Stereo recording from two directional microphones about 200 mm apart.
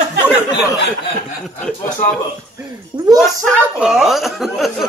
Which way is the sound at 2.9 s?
25° right (ahead or behind).